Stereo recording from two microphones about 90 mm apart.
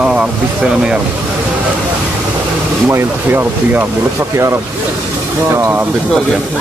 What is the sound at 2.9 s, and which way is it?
Speech, 30° right (ahead or behind).